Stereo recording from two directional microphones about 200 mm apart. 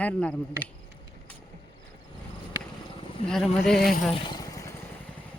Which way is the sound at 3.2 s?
Centre (ahead or behind).